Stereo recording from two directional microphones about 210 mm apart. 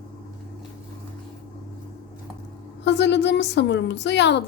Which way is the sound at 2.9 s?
55° left (ahead or behind).